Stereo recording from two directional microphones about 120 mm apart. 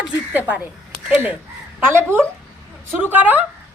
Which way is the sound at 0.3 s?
10° right (ahead or behind).